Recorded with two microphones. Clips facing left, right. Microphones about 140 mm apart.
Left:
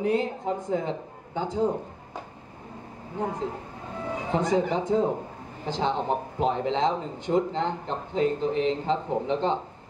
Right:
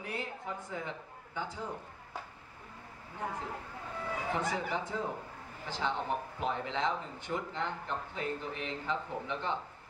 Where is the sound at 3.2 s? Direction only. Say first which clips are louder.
Left 9 dB; 15° left (ahead or behind).